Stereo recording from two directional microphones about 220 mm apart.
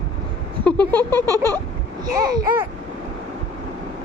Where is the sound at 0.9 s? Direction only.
10° left (ahead or behind).